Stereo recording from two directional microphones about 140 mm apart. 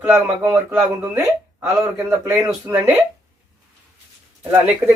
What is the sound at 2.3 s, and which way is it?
Speech, 15° right (ahead or behind).